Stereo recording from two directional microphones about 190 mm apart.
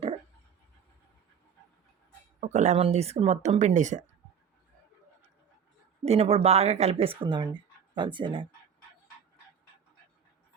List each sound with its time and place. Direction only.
2.4 s speech: 40° right (ahead or behind)
6.1 s speech: 30° right (ahead or behind)